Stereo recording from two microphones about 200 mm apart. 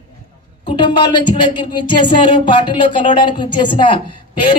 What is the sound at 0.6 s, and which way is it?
A woman's voice, 25° left (ahead or behind).